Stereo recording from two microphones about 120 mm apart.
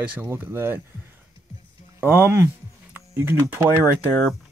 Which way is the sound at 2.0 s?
20° right (ahead or behind).